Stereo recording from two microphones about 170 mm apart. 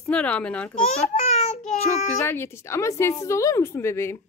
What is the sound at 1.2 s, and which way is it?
Child singing, 40° left (ahead or behind).